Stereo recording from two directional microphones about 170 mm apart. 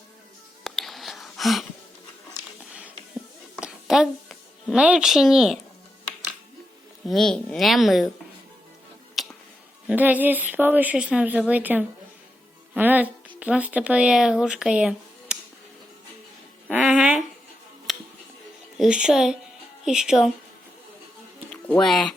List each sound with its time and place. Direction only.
0.6 s whispering: centre (ahead or behind)
3.6 s a sound: 5° right (ahead or behind)
7.1 s speech: centre (ahead or behind)
9.2 s finger snapping: centre (ahead or behind)
9.8 s speech: 10° right (ahead or behind)
16.7 s a sound: 5° right (ahead or behind)
17.9 s music: centre (ahead or behind)
18.8 s speech: 5° right (ahead or behind)
21.8 s speech: centre (ahead or behind)